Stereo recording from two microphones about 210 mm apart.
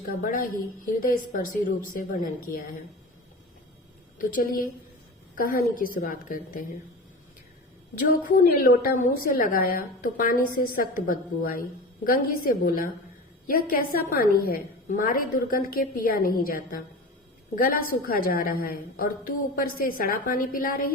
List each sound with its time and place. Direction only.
0.2 s a woman's voice: 40° left (ahead or behind)
4.2 s a woman's voice: 40° left (ahead or behind)
8.4 s a woman's voice: 45° left (ahead or behind)